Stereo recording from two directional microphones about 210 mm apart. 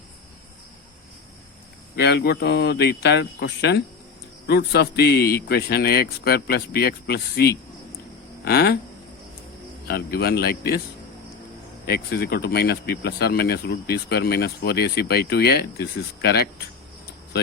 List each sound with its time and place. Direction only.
2.0 s speech: 50° left (ahead or behind)
9.8 s speech: 45° left (ahead or behind)
11.9 s speech: 50° left (ahead or behind)